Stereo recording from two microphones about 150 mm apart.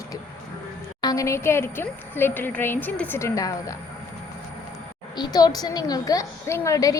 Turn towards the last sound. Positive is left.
turn(degrees=20)  # may be behind; listen again after turning